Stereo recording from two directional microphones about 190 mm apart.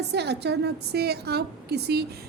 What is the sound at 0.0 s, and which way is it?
A woman's voice, 60° right (ahead or behind).